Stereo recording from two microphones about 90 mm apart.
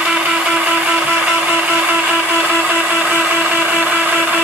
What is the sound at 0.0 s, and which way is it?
Music, 10° right (ahead or behind).